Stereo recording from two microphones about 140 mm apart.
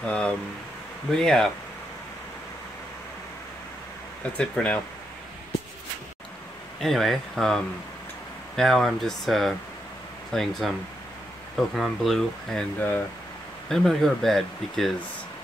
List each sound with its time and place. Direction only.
0.0 s speech: 5° left (ahead or behind)
4.2 s speech: 10° left (ahead or behind)
6.8 s speech: centre (ahead or behind)